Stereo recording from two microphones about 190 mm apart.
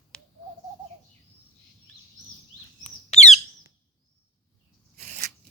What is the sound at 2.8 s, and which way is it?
Bird, 35° left (ahead or behind).